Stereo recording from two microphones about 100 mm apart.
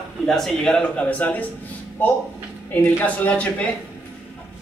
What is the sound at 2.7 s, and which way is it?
Speech, 15° left (ahead or behind).